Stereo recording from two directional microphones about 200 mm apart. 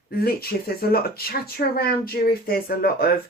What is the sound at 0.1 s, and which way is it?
Speech, 50° left (ahead or behind).